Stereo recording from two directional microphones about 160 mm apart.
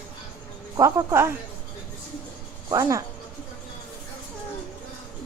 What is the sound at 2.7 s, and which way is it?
Speech, 20° right (ahead or behind).